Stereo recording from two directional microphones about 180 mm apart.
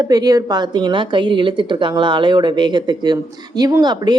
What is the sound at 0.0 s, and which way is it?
Speech, 20° right (ahead or behind).